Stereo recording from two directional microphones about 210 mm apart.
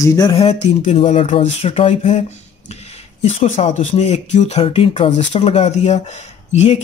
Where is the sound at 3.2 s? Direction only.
35° left (ahead or behind).